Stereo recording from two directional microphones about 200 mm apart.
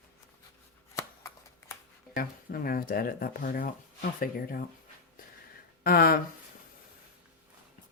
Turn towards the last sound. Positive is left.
turn(degrees=45)  # may be behind; listen again after turning